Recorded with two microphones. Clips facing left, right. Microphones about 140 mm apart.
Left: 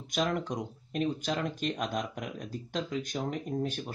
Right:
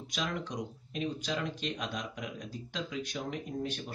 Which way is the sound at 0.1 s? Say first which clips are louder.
Left 6 dB; 50° left (ahead or behind).